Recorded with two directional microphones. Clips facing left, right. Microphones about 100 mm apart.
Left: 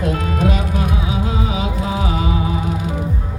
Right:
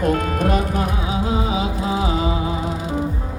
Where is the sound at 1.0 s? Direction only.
30° right (ahead or behind).